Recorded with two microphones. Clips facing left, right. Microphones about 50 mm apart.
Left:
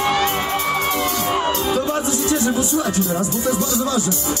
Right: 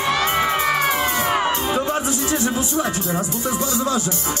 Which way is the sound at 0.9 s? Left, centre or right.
Centre.